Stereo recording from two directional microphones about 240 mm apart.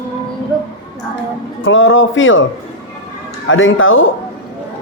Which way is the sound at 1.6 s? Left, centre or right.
Left.